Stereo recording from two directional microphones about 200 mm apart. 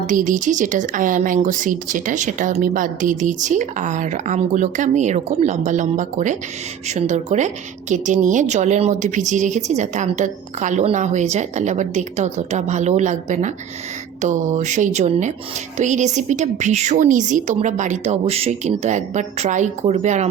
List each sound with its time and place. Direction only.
0.1 s a woman's voice: 40° right (ahead or behind)